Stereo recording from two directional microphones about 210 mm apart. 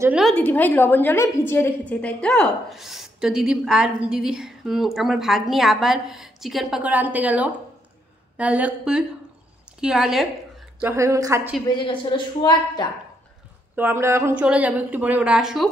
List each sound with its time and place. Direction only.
0.0 s a woman's voice: centre (ahead or behind)
11.8 s a woman's voice: 25° left (ahead or behind)
13.7 s speech: 10° right (ahead or behind)